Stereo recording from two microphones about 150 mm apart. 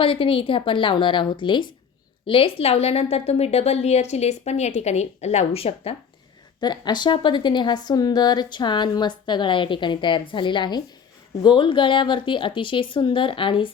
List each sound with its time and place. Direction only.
0.0 s a woman's voice: 35° left (ahead or behind)
6.6 s a woman's voice: 30° left (ahead or behind)